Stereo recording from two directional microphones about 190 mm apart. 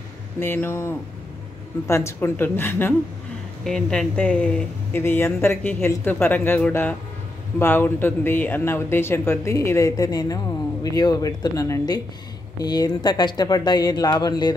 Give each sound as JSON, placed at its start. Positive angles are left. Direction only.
{"t": 0.4, "sound": "speech", "side_deg": 10}